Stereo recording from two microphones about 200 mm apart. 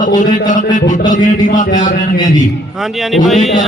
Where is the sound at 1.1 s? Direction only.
40° left (ahead or behind).